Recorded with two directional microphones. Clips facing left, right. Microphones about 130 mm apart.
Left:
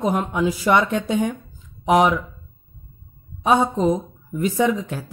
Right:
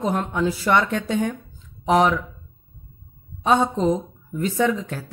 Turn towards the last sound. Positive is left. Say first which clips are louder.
# left 1 dB
turn(degrees=15)  # may be behind; listen again after turning